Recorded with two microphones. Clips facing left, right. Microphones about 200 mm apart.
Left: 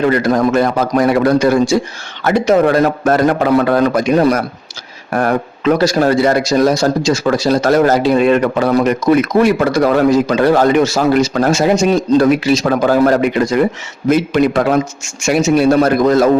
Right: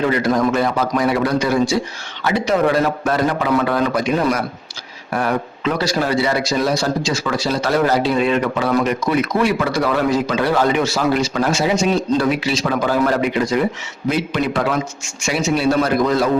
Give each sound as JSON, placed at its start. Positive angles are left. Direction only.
{"t": 0.1, "sound": "a man's voice", "side_deg": 45}